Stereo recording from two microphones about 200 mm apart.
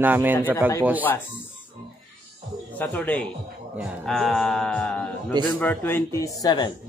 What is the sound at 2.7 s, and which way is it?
Speech, 10° left (ahead or behind).